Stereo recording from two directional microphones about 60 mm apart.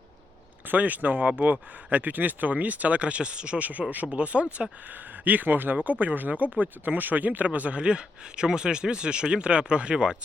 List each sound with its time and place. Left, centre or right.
0.7 s speech: right